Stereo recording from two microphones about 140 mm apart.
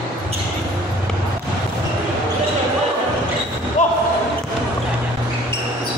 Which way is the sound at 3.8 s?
60° left (ahead or behind).